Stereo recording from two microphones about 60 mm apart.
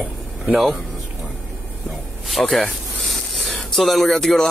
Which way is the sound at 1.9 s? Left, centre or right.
Centre.